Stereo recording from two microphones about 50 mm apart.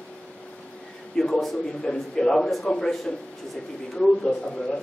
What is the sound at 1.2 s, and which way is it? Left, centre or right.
A man's voice, centre.